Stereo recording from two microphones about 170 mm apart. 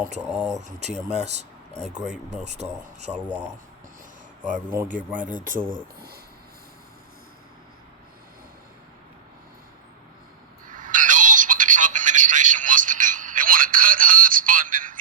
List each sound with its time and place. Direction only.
0.6 s speech: 40° right (ahead or behind)
4.7 s a man's voice: 10° right (ahead or behind)
5.2 s speech: 50° right (ahead or behind)
5.7 s speech: 65° right (ahead or behind)
10.7 s telephone: 50° right (ahead or behind)